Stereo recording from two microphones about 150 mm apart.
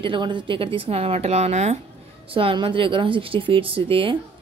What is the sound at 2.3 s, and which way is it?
Speech, 35° right (ahead or behind).